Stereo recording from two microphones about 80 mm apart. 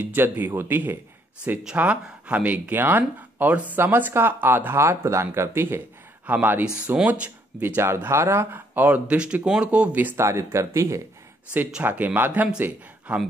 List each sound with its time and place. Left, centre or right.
0.0 s speech: right
7.6 s speech: right
10.1 s speech: right
11.8 s speech: right